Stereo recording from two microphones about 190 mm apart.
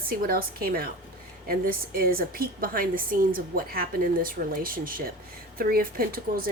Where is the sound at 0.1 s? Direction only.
50° right (ahead or behind).